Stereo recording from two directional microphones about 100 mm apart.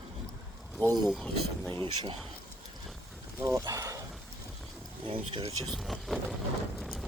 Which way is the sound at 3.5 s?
35° right (ahead or behind).